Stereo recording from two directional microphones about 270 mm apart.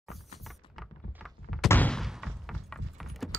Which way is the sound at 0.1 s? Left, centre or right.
Centre.